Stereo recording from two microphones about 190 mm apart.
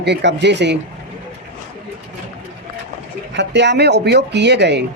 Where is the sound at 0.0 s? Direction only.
65° right (ahead or behind).